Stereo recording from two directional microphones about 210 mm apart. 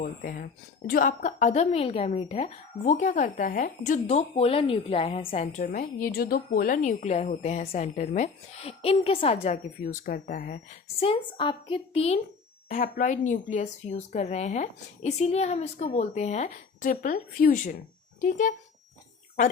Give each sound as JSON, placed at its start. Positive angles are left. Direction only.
{"t": 0.0, "sound": "a woman's voice", "side_deg": 40}
{"t": 9.8, "sound": "a woman's voice", "side_deg": 40}